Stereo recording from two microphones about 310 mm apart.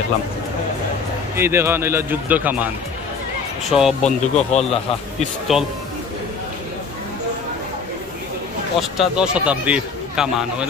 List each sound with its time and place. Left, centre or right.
1.3 s speech: centre
3.7 s a man's voice: centre
4.4 s speech: left
5.5 s a man's voice: centre
8.7 s a man's voice: centre